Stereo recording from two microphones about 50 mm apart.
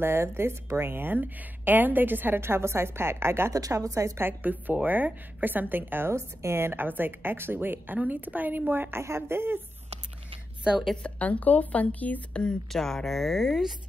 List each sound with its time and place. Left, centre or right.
0.0 s a woman's voice: right
4.2 s a woman's voice: right
9.0 s a woman's voice: right
11.0 s a woman's voice: left
12.7 s speech: centre